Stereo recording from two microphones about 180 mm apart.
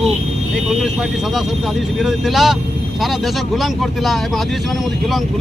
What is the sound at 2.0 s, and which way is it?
Speech, centre (ahead or behind).